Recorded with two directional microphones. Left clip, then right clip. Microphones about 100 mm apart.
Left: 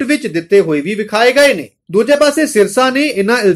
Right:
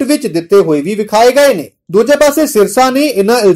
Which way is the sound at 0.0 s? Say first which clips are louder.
Right 3 dB; 35° right (ahead or behind).